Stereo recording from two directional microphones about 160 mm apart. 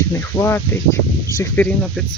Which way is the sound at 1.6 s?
10° left (ahead or behind).